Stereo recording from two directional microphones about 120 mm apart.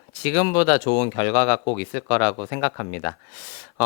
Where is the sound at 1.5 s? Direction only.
30° left (ahead or behind).